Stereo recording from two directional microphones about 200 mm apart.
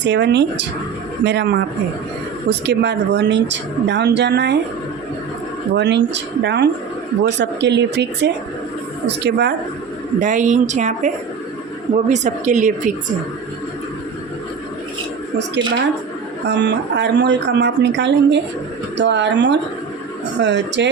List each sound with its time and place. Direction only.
0.0 s speech: 60° right (ahead or behind)
5.7 s speech: 60° right (ahead or behind)
10.2 s a woman's voice: 40° right (ahead or behind)
16.5 s speech: 60° right (ahead or behind)